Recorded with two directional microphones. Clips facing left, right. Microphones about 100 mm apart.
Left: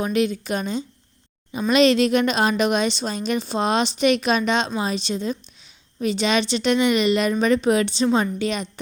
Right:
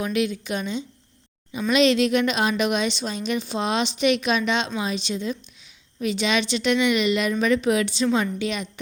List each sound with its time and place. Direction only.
0.0 s a woman's voice: 35° left (ahead or behind)